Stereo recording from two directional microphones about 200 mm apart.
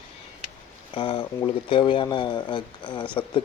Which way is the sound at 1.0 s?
25° left (ahead or behind).